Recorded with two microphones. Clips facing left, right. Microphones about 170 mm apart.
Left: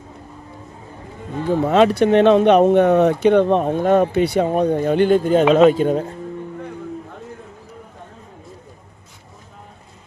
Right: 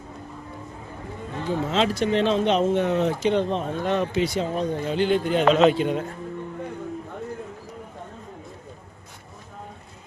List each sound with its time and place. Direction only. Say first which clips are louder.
1.5 s speech: left 9 dB; 60° left (ahead or behind); by 6.1 s 45° left (ahead or behind)